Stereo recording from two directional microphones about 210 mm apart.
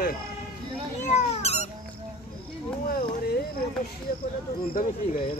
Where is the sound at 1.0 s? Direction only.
35° left (ahead or behind).